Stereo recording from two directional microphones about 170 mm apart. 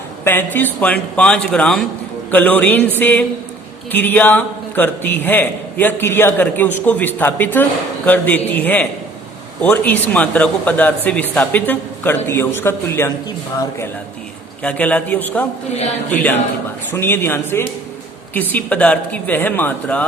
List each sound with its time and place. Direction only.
0.3 s speech: 10° left (ahead or behind)